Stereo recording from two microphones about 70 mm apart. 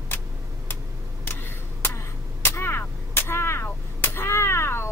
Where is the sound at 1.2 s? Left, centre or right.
Left.